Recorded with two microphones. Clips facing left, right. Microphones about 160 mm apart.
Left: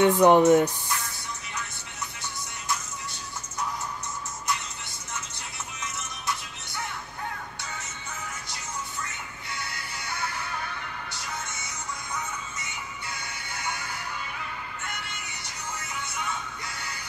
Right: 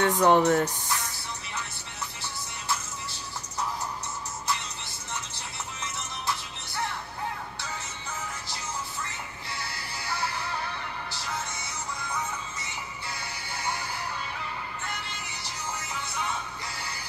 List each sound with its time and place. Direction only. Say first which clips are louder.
0.0 s speech: left 4 dB; 15° left (ahead or behind)